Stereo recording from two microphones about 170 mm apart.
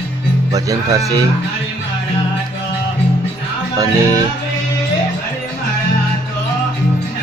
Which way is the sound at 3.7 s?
20° right (ahead or behind).